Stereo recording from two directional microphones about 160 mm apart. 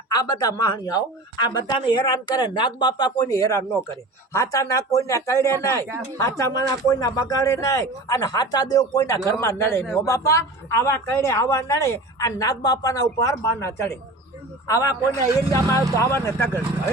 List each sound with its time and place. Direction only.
0.1 s speech: 25° left (ahead or behind)
16.0 s speech: 15° left (ahead or behind)